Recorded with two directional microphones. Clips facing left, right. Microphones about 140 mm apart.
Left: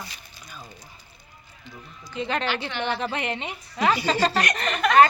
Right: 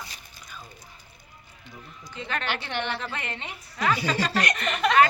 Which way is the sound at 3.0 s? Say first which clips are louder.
Left 6 dB; 20° left (ahead or behind).